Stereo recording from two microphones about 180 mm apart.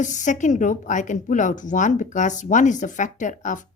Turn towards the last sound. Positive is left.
turn(degrees=45)  # may be behind; listen again after turning